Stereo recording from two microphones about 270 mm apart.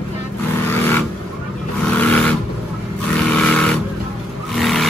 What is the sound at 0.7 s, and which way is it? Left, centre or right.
Vehicle, centre.